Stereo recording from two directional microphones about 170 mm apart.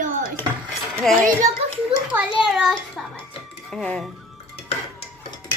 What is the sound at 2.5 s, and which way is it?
A child's voice, centre (ahead or behind).